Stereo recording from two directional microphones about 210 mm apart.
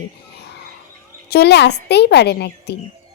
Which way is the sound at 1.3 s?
50° left (ahead or behind).